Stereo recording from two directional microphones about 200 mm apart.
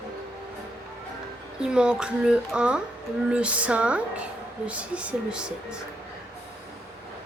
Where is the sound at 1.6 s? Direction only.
5° right (ahead or behind).